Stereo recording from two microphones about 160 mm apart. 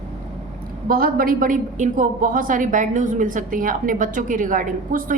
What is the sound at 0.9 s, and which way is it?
A woman's voice, 65° right (ahead or behind).